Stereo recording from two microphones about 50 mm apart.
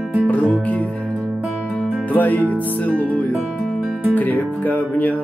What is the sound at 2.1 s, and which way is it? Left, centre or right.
Music, left.